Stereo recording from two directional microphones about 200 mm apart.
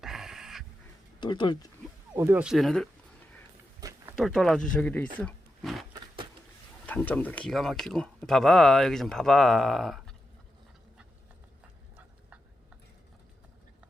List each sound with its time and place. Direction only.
0.0 s dog: centre (ahead or behind)
1.2 s speech: 20° left (ahead or behind)
2.1 s speech: 10° right (ahead or behind)
3.8 s a sound: 15° right (ahead or behind)
4.1 s speech: 5° left (ahead or behind)
5.2 s wild animals: centre (ahead or behind)
6.8 s speech: 10° left (ahead or behind)